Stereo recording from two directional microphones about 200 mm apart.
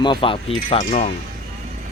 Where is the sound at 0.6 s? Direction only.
40° left (ahead or behind).